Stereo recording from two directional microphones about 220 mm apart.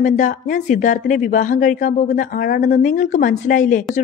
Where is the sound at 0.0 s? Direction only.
35° left (ahead or behind).